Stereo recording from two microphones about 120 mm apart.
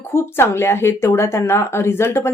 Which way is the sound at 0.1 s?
20° left (ahead or behind).